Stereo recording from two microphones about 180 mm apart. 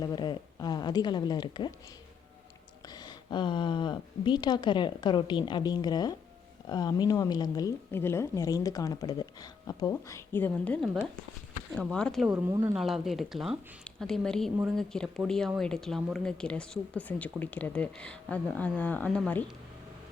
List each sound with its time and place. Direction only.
0.0 s speech: 25° left (ahead or behind)
2.8 s speech: 25° left (ahead or behind); by 12.4 s centre (ahead or behind)
12.5 s a woman's voice: 15° right (ahead or behind)
12.7 s speech: centre (ahead or behind)